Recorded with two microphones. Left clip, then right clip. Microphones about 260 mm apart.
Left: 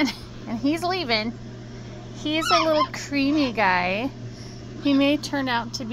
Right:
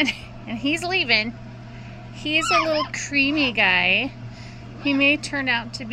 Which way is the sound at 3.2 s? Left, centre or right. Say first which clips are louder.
Right 3 dB; left.